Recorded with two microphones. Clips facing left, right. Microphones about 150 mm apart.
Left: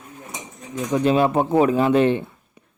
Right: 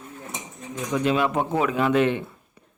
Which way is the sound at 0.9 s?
35° left (ahead or behind).